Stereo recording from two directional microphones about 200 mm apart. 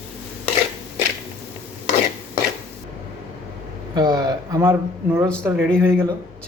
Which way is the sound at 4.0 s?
20° right (ahead or behind).